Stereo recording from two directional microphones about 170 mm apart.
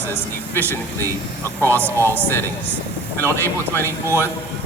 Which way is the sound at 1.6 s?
15° right (ahead or behind).